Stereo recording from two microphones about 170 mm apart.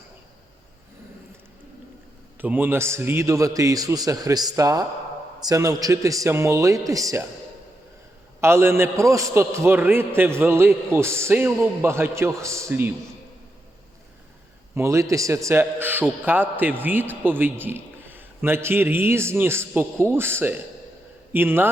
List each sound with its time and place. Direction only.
2.4 s a man's voice: 10° right (ahead or behind)
8.4 s a man's voice: 15° right (ahead or behind)
14.8 s a man's voice: 15° right (ahead or behind)